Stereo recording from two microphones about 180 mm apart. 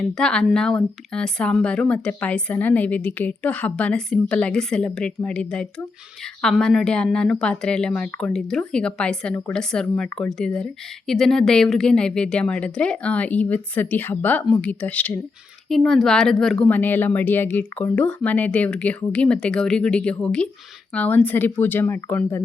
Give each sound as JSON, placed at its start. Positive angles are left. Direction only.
{"t": 0.0, "sound": "a woman's voice", "side_deg": 5}